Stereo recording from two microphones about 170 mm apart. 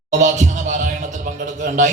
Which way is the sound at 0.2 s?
45° right (ahead or behind).